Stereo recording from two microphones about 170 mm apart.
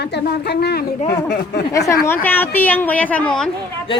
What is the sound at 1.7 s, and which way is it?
A woman's voice, 20° left (ahead or behind).